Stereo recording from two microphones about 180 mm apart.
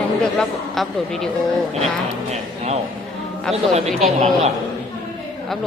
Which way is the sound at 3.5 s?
35° right (ahead or behind).